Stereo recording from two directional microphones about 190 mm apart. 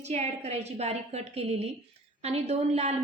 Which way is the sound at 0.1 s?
35° right (ahead or behind).